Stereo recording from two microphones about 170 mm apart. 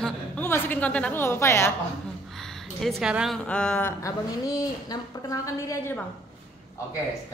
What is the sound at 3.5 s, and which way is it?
Speech, 10° left (ahead or behind).